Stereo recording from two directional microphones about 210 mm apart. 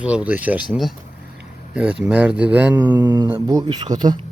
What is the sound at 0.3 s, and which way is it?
Speech, 5° right (ahead or behind).